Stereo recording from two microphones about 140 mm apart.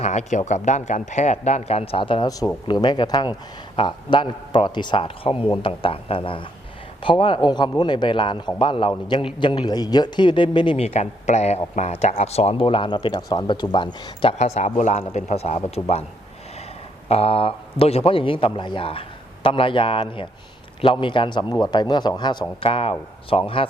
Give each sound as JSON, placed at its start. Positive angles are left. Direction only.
{"t": 0.0, "sound": "speech", "side_deg": 55}
{"t": 2.2, "sound": "speech", "side_deg": 25}
{"t": 10.8, "sound": "speech", "side_deg": 50}
{"t": 14.3, "sound": "speech", "side_deg": 50}
{"t": 17.1, "sound": "speech", "side_deg": 45}